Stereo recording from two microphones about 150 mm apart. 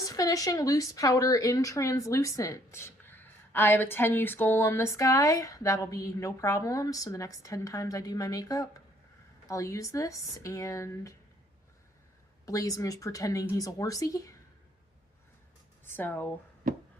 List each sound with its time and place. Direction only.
0.0 s speech: 25° left (ahead or behind)
12.5 s speech: 20° left (ahead or behind)
15.8 s speech: 15° left (ahead or behind)